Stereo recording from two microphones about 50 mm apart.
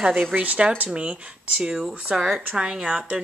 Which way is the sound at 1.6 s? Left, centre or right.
Centre.